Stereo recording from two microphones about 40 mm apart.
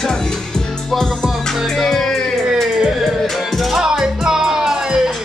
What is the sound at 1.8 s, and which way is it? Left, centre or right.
Music, centre.